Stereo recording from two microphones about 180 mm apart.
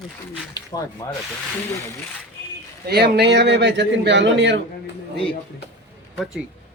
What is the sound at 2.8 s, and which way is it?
A man's voice, 65° right (ahead or behind).